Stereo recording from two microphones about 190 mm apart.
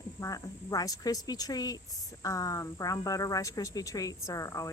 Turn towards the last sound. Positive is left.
turn(degrees=15)  # may be behind; listen again after turning